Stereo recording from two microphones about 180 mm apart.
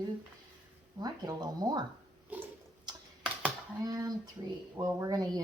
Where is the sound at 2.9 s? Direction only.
25° right (ahead or behind).